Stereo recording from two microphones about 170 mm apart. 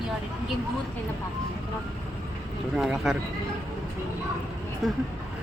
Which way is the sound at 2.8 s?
Centre (ahead or behind).